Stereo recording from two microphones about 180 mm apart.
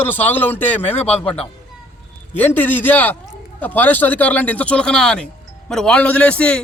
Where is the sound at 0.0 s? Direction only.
10° left (ahead or behind).